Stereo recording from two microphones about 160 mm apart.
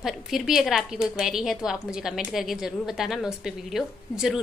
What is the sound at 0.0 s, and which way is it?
A woman's voice, centre (ahead or behind).